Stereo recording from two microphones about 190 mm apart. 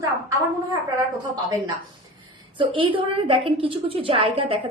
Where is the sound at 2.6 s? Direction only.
25° right (ahead or behind).